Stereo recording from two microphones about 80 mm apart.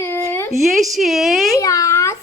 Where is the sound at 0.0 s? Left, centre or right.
Left.